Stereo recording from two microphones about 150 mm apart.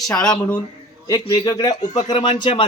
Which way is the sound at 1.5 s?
25° left (ahead or behind).